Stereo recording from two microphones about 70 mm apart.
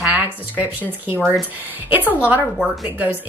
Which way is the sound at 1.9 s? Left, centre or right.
Right.